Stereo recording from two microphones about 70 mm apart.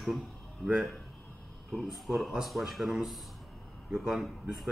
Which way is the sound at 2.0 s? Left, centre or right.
Centre.